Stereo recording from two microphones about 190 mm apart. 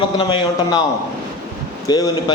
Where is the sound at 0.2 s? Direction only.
25° left (ahead or behind).